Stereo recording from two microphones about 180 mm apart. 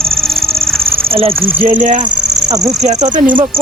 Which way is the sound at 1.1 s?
30° right (ahead or behind).